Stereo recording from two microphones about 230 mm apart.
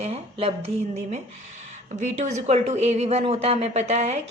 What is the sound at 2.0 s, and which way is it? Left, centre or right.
Speech, right.